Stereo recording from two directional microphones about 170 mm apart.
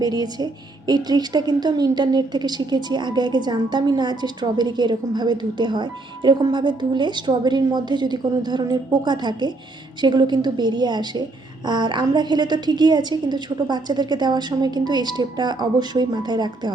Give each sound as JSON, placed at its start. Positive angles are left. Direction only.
{"t": 0.0, "sound": "a woman's voice", "side_deg": -25}